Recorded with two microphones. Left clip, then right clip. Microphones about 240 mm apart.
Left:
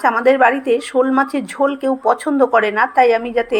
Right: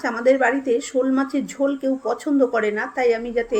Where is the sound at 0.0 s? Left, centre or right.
Centre.